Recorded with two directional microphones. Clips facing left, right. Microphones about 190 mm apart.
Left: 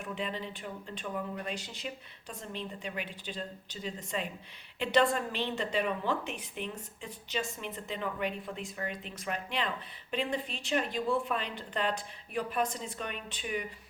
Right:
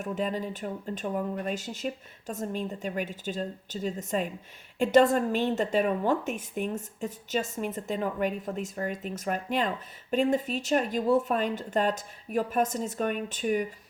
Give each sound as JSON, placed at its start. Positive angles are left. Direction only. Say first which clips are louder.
{"t": 0.0, "sound": "speech", "louder": "right 7 dB", "side_deg": -45}